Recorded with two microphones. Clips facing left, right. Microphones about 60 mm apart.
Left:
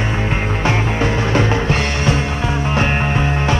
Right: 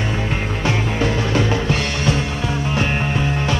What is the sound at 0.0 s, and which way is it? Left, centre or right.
Music, left.